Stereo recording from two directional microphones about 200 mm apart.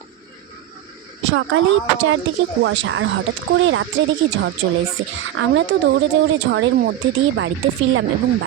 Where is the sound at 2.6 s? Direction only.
65° right (ahead or behind).